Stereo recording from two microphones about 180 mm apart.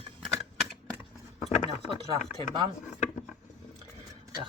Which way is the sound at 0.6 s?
Centre (ahead or behind).